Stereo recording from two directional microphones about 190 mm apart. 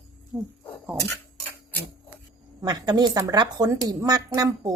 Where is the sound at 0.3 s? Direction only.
5° right (ahead or behind).